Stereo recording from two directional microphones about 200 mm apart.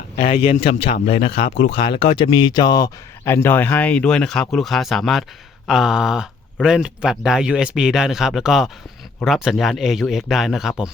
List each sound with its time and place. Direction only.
0.3 s speech: 30° left (ahead or behind); by 10.9 s 5° right (ahead or behind)